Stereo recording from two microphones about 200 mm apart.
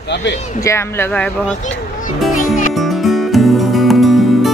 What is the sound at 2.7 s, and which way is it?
Music, centre (ahead or behind).